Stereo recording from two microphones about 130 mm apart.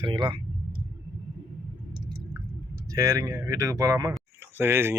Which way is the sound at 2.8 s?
25° right (ahead or behind).